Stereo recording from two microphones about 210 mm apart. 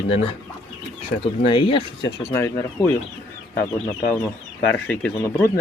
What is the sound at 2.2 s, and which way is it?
Speech, 10° left (ahead or behind).